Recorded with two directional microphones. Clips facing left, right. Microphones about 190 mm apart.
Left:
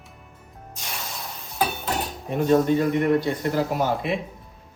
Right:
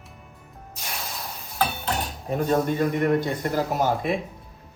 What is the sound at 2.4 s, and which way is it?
Speech, 50° right (ahead or behind).